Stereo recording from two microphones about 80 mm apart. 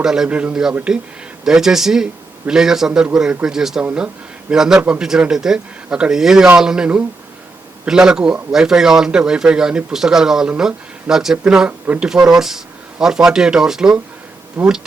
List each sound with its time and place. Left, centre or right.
0.0 s a man's voice: centre
14.6 s speech: centre